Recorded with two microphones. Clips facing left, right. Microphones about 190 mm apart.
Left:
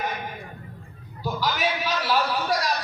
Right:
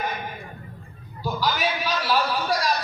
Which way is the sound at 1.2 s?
20° left (ahead or behind).